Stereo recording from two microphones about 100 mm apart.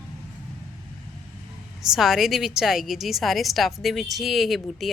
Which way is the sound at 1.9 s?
5° right (ahead or behind).